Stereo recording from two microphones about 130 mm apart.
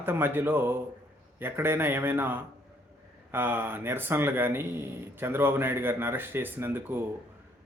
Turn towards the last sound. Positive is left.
turn(degrees=-15)  # may be behind; listen again after turning